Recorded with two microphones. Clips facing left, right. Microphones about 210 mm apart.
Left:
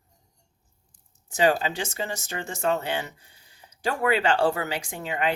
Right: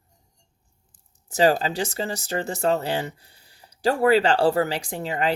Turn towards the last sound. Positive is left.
turn(degrees=-35)  # may be behind; listen again after turning